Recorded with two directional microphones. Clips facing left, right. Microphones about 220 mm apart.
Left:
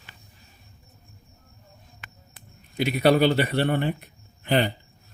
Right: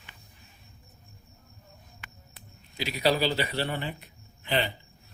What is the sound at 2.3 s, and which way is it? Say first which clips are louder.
A man's voice: left 11 dB; 55° left (ahead or behind).